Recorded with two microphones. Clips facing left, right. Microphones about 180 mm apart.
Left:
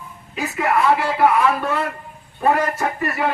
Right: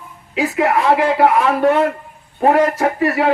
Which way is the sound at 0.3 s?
90° right.